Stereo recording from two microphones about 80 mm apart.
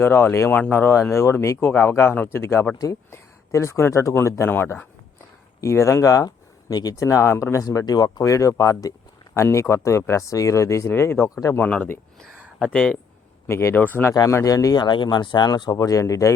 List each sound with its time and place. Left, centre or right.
0.0 s speech: left
2.7 s speech: left
3.1 s speech: left
5.5 s speech: left
9.3 s speech: left
11.6 s speech: left
12.2 s speech: centre
13.5 s speech: left
13.7 s speech: left
14.3 s speech: left
14.8 s speech: left
15.8 s speech: left